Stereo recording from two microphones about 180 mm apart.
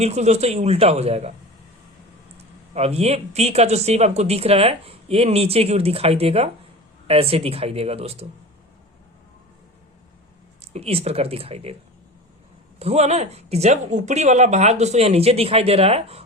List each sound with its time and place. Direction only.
0.0 s speech: 35° right (ahead or behind)
2.4 s speech: 35° right (ahead or behind)
10.8 s speech: 35° right (ahead or behind)
12.8 s speech: 35° right (ahead or behind)